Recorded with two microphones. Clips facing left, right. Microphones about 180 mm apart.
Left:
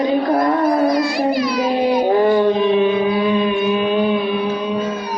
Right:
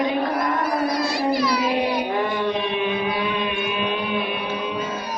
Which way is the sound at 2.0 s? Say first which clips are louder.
Left 9 dB; 35° left (ahead or behind).